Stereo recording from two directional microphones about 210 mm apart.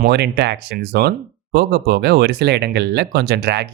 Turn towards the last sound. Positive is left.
turn(degrees=-55)  # may be behind; listen again after turning